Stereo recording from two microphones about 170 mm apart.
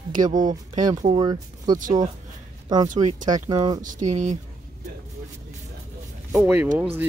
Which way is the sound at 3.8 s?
45° right (ahead or behind).